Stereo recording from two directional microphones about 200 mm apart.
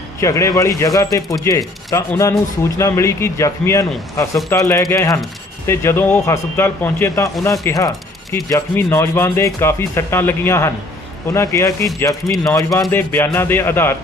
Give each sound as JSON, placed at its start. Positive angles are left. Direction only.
{"t": 0.2, "sound": "speech", "side_deg": 15}